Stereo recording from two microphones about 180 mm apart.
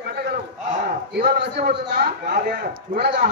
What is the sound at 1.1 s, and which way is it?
A man's voice, 60° right (ahead or behind).